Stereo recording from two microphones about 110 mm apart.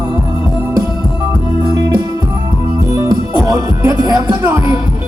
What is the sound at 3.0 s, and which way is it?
Music, 25° right (ahead or behind).